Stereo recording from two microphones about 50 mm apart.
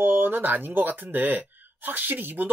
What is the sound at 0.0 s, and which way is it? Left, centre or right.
Speech, right.